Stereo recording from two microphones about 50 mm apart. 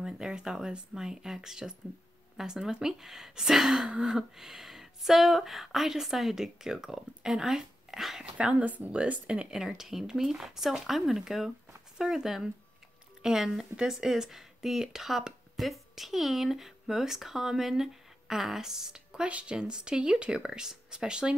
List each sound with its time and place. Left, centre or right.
0.0 s speech: centre
8.4 s speech: right
9.7 s speech: centre
19.2 s speech: right